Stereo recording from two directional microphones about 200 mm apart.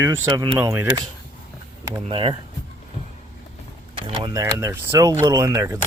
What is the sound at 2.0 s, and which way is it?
Speech, 25° right (ahead or behind).